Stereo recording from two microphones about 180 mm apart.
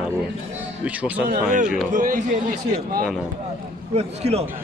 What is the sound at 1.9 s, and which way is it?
A man's voice, 45° right (ahead or behind).